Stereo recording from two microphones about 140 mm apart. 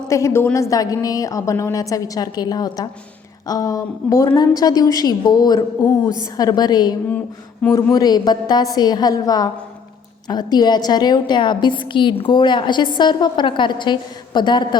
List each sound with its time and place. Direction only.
0.1 s a woman's voice: 20° left (ahead or behind)
7.6 s a man's voice: 10° left (ahead or behind)
7.9 s a woman's voice: 30° left (ahead or behind)